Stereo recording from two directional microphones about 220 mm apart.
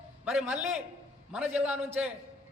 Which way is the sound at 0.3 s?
5° right (ahead or behind).